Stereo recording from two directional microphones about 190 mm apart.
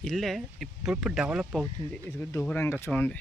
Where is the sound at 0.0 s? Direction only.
Centre (ahead or behind).